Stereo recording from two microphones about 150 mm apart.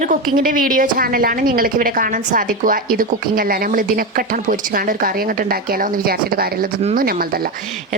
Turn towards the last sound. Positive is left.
turn(degrees=-85)